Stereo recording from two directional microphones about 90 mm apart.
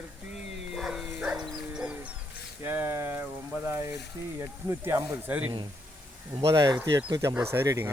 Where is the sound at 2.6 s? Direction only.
25° right (ahead or behind).